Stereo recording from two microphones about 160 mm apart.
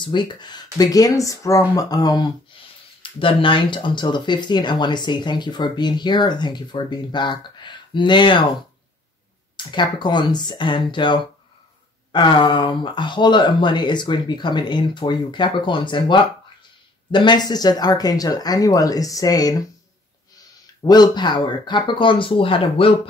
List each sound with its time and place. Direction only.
0.0 s speech: 30° left (ahead or behind)
9.6 s speech: 30° left (ahead or behind)
20.8 s speech: 25° left (ahead or behind)